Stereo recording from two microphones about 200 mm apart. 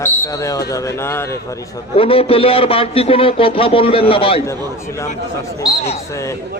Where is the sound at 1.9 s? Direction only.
30° left (ahead or behind).